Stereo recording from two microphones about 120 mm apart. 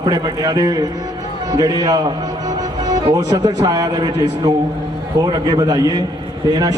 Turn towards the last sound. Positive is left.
turn(degrees=-30)  # may be behind; listen again after turning